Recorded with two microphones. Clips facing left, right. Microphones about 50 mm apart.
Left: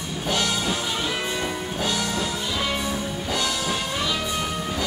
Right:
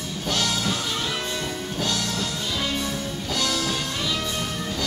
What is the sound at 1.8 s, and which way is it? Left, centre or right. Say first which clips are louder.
Music: left 2 dB; centre.